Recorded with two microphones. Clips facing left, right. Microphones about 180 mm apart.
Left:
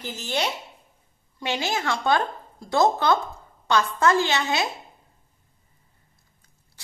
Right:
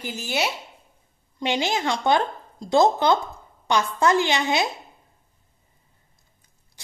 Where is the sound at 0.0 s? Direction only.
10° right (ahead or behind).